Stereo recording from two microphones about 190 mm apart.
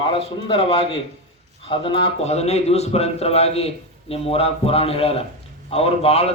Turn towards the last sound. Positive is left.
turn(degrees=30)  # may be behind; listen again after turning